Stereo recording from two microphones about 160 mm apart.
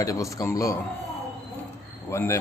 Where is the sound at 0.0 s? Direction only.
20° left (ahead or behind).